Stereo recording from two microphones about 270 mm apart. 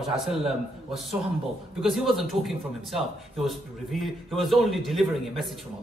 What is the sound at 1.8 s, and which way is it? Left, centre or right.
A man's voice, centre.